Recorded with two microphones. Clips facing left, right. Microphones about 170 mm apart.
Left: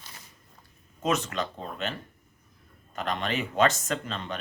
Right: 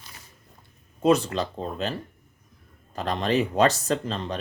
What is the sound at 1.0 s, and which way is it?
Speech, 35° right (ahead or behind).